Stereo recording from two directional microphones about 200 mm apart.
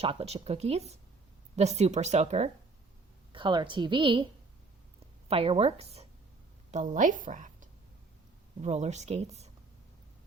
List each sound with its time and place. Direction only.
0.0 s a woman's voice: 30° right (ahead or behind)
3.3 s a woman's voice: 25° right (ahead or behind)
5.3 s a woman's voice: 30° right (ahead or behind)